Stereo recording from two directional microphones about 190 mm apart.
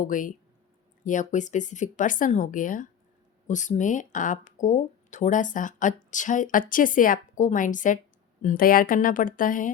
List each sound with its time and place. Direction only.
0.0 s speech: 45° left (ahead or behind)